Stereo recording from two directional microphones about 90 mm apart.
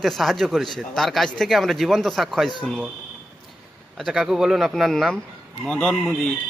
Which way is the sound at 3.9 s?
Centre (ahead or behind).